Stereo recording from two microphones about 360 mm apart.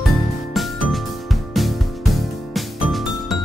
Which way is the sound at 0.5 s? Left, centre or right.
Centre.